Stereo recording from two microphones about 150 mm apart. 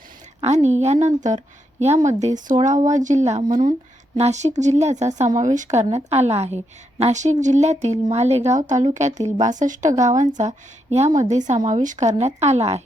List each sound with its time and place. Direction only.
0.4 s speech: 50° right (ahead or behind)
3.5 s speech: 65° right (ahead or behind)
4.2 s speech: 50° right (ahead or behind)